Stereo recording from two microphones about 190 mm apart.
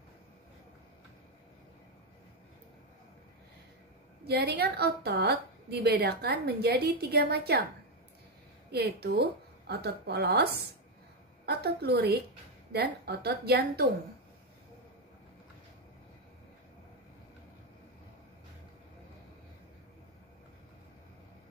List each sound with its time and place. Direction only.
4.2 s a woman's voice: 55° right (ahead or behind)
8.7 s a woman's voice: 55° right (ahead or behind)